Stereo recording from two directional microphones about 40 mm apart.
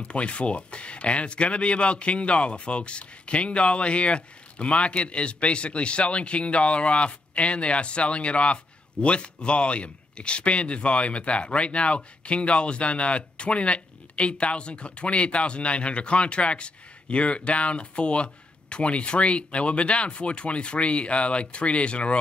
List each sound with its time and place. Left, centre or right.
0.1 s speech: left